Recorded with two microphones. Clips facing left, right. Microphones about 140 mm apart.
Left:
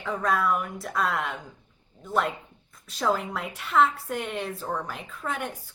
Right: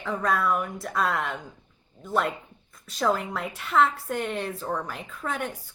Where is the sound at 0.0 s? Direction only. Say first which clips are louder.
Even; centre (ahead or behind).